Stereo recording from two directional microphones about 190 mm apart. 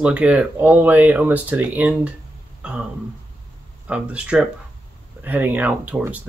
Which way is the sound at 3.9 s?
5° right (ahead or behind).